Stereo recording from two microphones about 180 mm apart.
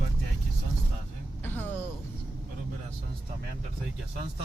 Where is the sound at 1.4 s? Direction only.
10° left (ahead or behind).